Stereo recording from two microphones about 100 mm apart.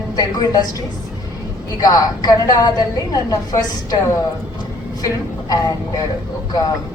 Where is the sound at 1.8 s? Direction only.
40° left (ahead or behind).